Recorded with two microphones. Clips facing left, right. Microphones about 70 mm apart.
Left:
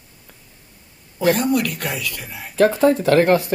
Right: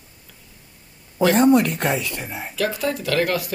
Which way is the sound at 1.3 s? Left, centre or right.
Right.